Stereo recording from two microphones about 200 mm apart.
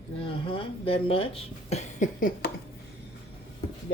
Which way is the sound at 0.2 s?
25° left (ahead or behind).